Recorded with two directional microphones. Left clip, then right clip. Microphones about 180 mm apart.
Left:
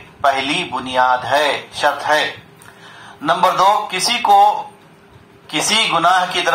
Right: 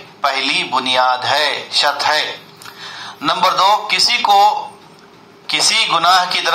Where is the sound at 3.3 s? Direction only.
30° right (ahead or behind).